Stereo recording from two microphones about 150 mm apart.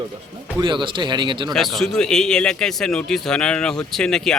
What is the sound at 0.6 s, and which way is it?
Speech, 35° right (ahead or behind).